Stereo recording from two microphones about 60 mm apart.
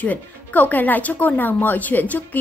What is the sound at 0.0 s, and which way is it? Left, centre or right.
Speech, left.